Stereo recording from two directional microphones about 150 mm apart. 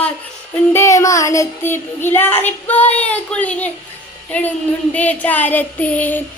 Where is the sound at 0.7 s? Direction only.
20° left (ahead or behind).